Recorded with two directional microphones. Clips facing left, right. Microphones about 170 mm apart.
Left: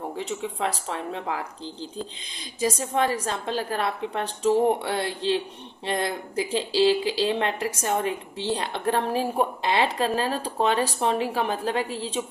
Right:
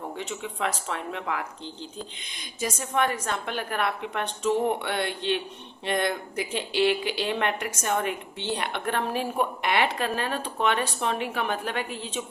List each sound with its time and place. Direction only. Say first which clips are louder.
0.2 s speech: left 3 dB; 30° left (ahead or behind)